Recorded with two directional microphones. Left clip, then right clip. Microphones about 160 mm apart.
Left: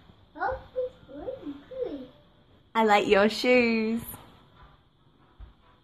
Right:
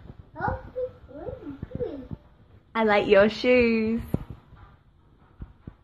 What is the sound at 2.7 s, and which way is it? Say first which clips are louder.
A woman's voice: right 1 dB; 5° left (ahead or behind).